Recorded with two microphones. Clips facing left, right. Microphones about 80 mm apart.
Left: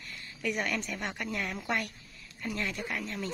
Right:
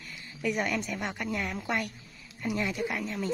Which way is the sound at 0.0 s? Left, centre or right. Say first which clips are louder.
Right 3 dB; centre.